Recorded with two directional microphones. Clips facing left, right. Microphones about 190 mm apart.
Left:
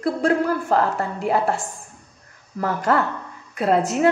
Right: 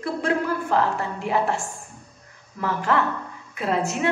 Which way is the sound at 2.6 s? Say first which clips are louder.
Left 2 dB; 45° left (ahead or behind).